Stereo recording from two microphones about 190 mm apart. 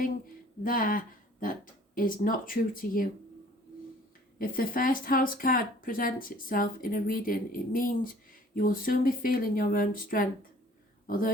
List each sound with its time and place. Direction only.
0.6 s speech: 45° left (ahead or behind)
4.4 s speech: 45° left (ahead or behind)
11.0 s a sound: 45° left (ahead or behind)